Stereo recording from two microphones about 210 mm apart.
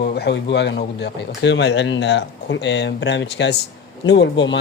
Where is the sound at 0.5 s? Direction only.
55° left (ahead or behind).